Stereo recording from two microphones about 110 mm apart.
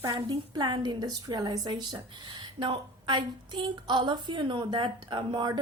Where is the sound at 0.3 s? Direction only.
40° right (ahead or behind).